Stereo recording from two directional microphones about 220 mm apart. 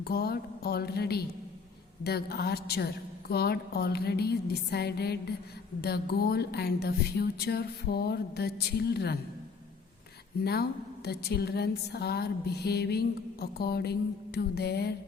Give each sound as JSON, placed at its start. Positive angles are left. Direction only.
{"t": 0.0, "sound": "a woman's voice", "side_deg": 45}
{"t": 10.4, "sound": "a woman's voice", "side_deg": 45}